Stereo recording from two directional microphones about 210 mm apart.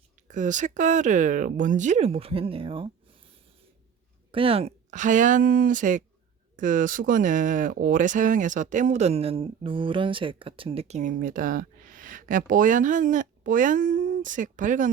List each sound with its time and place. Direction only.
0.3 s speech: 35° right (ahead or behind)
4.3 s speech: 25° right (ahead or behind)